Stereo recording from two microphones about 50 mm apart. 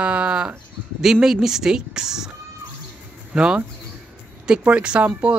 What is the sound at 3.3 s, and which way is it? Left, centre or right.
Speech, centre.